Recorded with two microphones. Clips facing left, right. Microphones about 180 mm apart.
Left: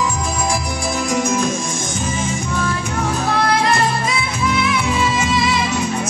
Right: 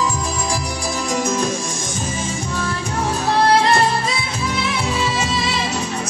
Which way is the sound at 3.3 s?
35° right (ahead or behind).